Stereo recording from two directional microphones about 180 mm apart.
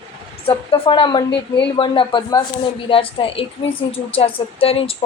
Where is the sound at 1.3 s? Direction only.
70° left (ahead or behind).